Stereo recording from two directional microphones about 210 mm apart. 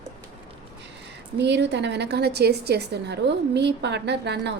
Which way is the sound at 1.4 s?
55° right (ahead or behind).